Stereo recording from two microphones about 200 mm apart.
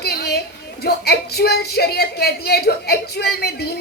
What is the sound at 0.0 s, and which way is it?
Speech, 50° left (ahead or behind).